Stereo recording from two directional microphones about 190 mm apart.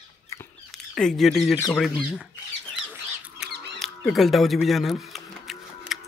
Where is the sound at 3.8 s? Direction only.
Centre (ahead or behind).